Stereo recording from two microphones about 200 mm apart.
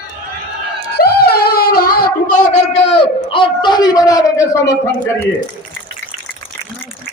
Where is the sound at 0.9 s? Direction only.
50° left (ahead or behind).